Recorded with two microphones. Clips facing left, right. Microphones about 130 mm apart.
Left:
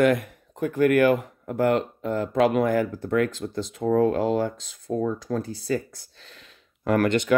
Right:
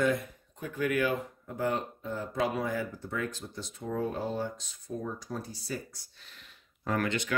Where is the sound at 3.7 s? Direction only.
85° left.